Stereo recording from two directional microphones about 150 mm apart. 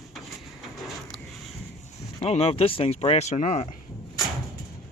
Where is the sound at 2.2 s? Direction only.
40° left (ahead or behind).